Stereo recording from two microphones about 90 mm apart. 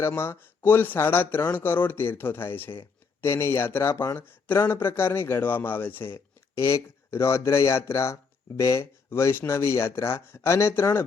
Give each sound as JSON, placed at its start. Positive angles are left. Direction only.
{"t": 0.0, "sound": "speech", "side_deg": 25}
{"t": 6.6, "sound": "speech", "side_deg": 35}